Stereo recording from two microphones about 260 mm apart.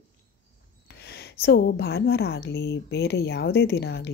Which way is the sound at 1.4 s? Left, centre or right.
Left.